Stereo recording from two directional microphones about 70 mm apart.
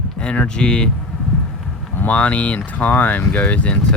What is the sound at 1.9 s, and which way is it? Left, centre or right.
Speech, left.